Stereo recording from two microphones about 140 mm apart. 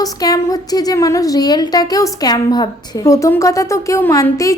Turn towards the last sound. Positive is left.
turn(degrees=20)  # may be behind; listen again after turning